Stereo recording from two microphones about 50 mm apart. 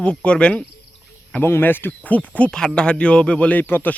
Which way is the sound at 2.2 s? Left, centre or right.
Left.